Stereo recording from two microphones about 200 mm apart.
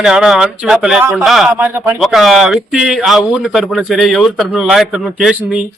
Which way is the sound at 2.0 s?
Centre (ahead or behind).